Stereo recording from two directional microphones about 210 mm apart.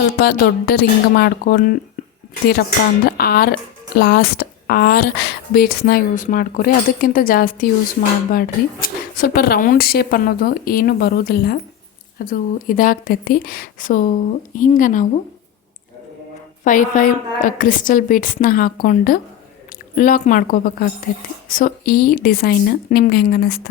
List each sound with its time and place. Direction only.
0.2 s a woman's voice: 50° left (ahead or behind)
3.1 s a woman's voice: 45° left (ahead or behind)
16.6 s a woman's voice: 40° left (ahead or behind)